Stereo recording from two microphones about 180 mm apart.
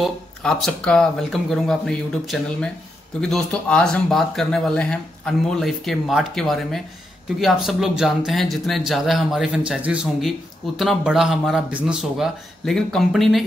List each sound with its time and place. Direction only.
0.0 s speech: centre (ahead or behind)